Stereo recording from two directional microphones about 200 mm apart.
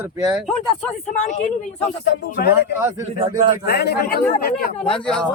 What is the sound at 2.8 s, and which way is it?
Speech, 15° right (ahead or behind).